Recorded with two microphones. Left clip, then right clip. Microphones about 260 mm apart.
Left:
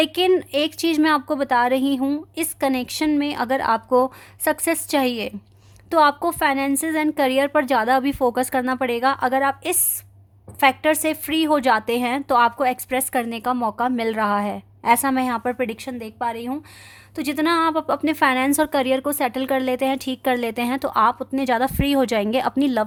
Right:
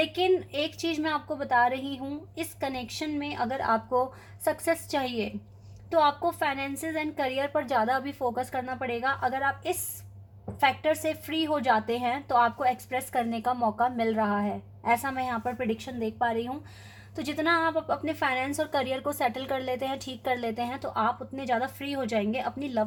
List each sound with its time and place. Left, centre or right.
0.0 s a woman's voice: left
8.2 s speech: left
8.6 s a woman's voice: left
17.2 s a woman's voice: left